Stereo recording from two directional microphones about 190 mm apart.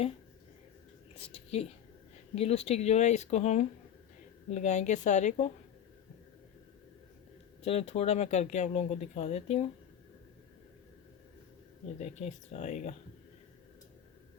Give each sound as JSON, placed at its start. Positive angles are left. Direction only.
{"t": 1.3, "sound": "speech", "side_deg": 35}
{"t": 7.6, "sound": "speech", "side_deg": 30}
{"t": 11.9, "sound": "speech", "side_deg": 35}